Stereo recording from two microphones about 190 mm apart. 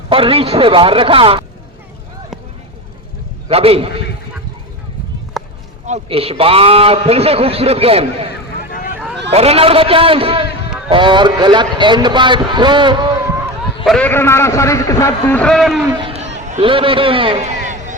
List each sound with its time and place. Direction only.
0.1 s a man's voice: 30° right (ahead or behind)
3.5 s a man's voice: 30° right (ahead or behind)
5.4 s a sound: centre (ahead or behind)
5.8 s a man's voice: 35° right (ahead or behind)
9.3 s a man's voice: 30° right (ahead or behind)
13.8 s a man's voice: 5° left (ahead or behind)
15.9 s a sound: 25° right (ahead or behind)
16.5 s a man's voice: 30° right (ahead or behind)